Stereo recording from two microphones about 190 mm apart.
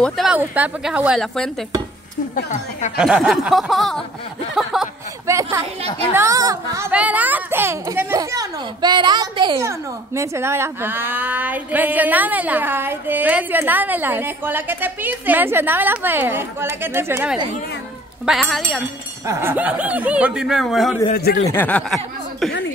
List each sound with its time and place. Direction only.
0.0 s a woman's voice: centre (ahead or behind)
2.3 s a woman's voice: 40° left (ahead or behind)
3.0 s a woman's voice: 5° right (ahead or behind)
5.2 s speech: 15° right (ahead or behind)
18.2 s a woman's voice: centre (ahead or behind)
19.2 s speech: 10° right (ahead or behind)
21.1 s speech: 50° left (ahead or behind)
21.5 s speech: 5° left (ahead or behind)